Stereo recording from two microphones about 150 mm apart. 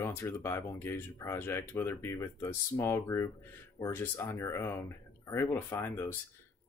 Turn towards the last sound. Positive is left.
turn(degrees=15)  # may be behind; listen again after turning